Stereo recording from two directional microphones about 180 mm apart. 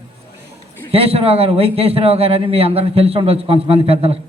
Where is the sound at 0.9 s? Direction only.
35° right (ahead or behind).